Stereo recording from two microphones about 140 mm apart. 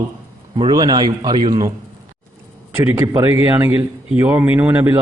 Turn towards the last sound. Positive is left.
turn(degrees=-15)  # may be behind; listen again after turning